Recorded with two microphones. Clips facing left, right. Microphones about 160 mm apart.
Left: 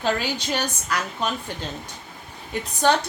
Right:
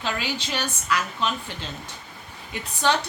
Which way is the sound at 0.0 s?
45° left (ahead or behind).